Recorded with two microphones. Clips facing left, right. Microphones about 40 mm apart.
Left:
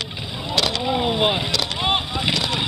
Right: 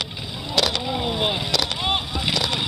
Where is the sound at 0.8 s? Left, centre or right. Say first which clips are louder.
Left 4 dB; centre.